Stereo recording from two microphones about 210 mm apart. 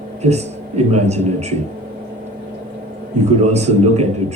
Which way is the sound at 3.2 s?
30° right (ahead or behind).